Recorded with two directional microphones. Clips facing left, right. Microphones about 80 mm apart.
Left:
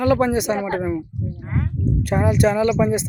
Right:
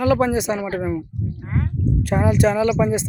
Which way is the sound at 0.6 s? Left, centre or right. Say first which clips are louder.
Left 2 dB; left.